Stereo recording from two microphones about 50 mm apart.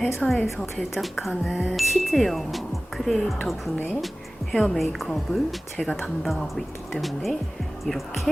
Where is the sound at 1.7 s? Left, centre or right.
Centre.